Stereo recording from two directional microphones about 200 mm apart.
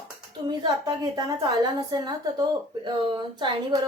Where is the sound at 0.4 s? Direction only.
20° right (ahead or behind).